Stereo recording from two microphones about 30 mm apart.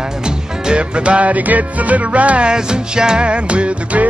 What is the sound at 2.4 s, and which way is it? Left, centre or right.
Music, right.